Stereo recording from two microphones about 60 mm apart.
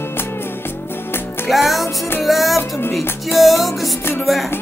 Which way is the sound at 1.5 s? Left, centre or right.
Centre.